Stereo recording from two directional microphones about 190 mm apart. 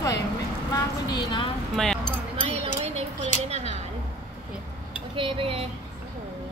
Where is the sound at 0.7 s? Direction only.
20° left (ahead or behind).